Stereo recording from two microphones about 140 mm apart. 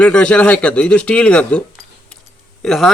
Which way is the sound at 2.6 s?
Centre (ahead or behind).